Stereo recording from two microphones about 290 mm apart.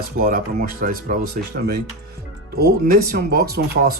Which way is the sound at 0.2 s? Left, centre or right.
Right.